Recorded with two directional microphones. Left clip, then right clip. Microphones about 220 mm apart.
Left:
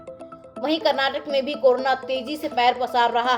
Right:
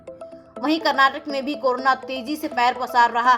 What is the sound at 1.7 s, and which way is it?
Speech, 20° right (ahead or behind).